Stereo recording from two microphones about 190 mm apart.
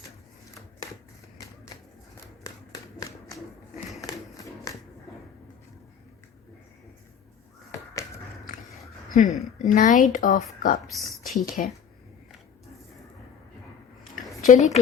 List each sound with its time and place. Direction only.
9.0 s a sound: 40° left (ahead or behind)
9.6 s speech: 40° left (ahead or behind)
10.8 s speech: centre (ahead or behind)
11.4 s a woman's voice: 40° left (ahead or behind)
14.4 s speech: 40° left (ahead or behind)